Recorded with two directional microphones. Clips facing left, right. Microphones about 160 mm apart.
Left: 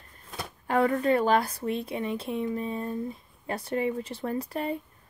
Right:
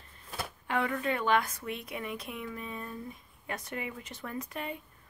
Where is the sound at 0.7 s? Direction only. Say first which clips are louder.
Left 8 dB; 40° left (ahead or behind).